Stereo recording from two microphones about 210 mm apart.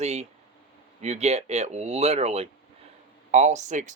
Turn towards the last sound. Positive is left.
turn(degrees=-35)  # may be behind; listen again after turning